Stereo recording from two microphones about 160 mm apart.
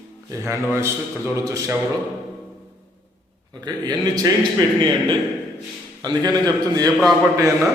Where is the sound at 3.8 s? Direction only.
25° right (ahead or behind).